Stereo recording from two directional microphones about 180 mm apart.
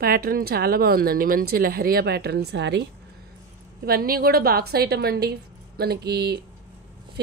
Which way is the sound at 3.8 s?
55° right (ahead or behind).